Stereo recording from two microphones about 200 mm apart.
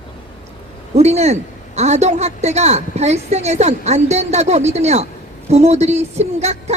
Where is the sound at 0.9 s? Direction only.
35° right (ahead or behind).